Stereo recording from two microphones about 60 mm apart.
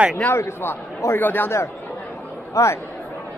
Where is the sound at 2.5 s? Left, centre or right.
Left.